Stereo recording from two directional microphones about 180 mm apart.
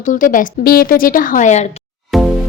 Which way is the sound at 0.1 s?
45° left (ahead or behind).